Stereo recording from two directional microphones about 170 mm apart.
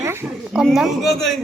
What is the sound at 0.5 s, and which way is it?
Speech, centre (ahead or behind).